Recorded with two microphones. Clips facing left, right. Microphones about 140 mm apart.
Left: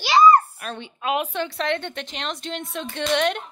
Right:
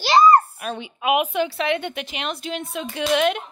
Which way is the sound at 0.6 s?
10° right (ahead or behind).